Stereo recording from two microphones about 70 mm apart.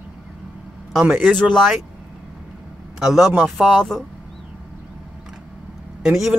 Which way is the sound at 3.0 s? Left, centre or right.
Centre.